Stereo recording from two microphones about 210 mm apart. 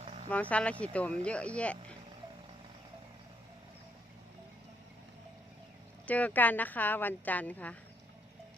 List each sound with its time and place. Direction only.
0.0 s a sound: 35° right (ahead or behind)
0.3 s speech: 5° left (ahead or behind)
6.1 s speech: 5° left (ahead or behind)